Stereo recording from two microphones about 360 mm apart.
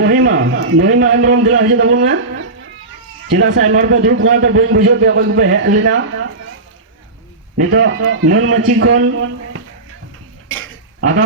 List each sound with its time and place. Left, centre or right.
0.0 s a man's voice: right
7.5 s a man's voice: right
10.5 s dishes: right